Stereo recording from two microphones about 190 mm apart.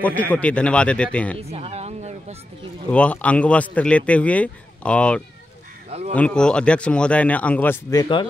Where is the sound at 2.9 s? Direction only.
5° left (ahead or behind).